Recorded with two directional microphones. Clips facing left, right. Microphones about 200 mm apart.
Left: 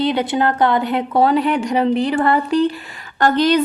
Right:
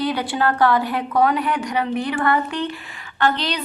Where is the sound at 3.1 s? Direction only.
45° left (ahead or behind).